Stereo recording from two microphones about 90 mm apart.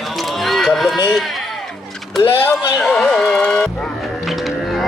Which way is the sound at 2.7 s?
Centre (ahead or behind).